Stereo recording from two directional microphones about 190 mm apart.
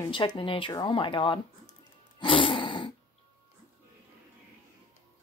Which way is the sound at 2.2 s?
25° left (ahead or behind).